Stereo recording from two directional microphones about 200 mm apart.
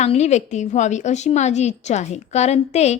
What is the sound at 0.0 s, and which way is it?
A woman's voice, 35° left (ahead or behind).